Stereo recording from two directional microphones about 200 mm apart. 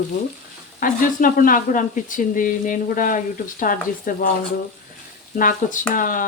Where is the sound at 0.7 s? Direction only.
45° left (ahead or behind).